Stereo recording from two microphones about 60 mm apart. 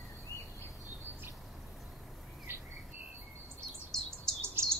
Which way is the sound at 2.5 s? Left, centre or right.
Right.